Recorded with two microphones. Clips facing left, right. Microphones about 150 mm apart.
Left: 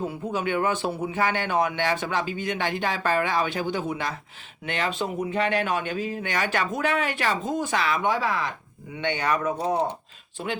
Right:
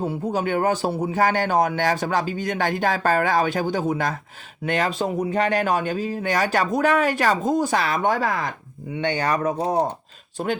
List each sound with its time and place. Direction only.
0.0 s a man's voice: 35° right (ahead or behind)
9.0 s a man's voice: 35° right (ahead or behind)